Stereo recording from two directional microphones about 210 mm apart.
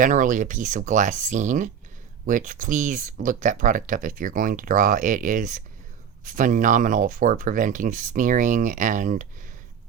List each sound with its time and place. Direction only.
0.0 s speech: 40° right (ahead or behind)